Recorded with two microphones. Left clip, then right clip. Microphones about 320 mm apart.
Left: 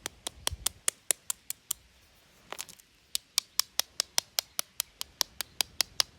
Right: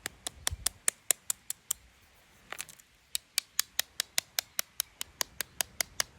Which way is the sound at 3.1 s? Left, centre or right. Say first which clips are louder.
Left 3 dB; centre.